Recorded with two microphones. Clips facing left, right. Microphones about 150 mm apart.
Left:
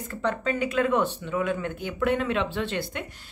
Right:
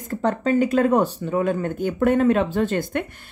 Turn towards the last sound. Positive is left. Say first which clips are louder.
# right 7 dB
turn(degrees=-55)  # may be behind; listen again after turning